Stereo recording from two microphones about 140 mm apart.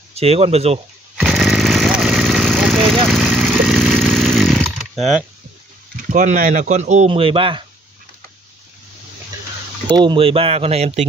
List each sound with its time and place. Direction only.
0.1 s speech: 45° right (ahead or behind)
1.1 s chainsaw: 10° right (ahead or behind)
1.4 s vehicle: centre (ahead or behind)
2.7 s a sound: 5° left (ahead or behind)
3.3 s chainsaw: 5° left (ahead or behind)
6.0 s speech: 65° right (ahead or behind)
7.1 s speech: 40° right (ahead or behind)
9.8 s speech: 35° right (ahead or behind); by 11.1 s 50° right (ahead or behind)